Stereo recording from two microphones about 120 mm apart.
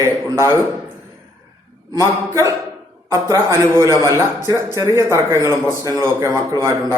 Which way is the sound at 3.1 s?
25° right (ahead or behind).